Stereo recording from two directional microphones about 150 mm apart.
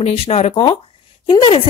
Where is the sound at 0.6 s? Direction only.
35° left (ahead or behind).